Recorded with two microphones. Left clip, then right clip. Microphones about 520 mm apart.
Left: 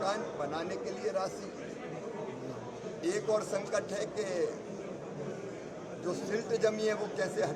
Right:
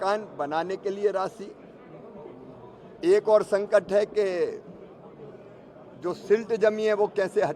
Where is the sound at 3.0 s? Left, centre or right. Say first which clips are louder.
Right 12 dB; right.